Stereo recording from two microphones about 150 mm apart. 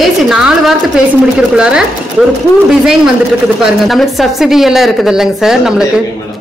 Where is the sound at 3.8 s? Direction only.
Centre (ahead or behind).